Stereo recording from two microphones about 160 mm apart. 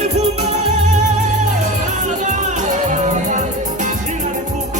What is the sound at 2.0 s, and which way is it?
Music, 50° right (ahead or behind).